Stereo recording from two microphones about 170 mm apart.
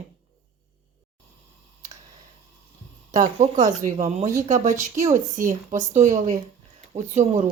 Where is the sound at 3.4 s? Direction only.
40° right (ahead or behind).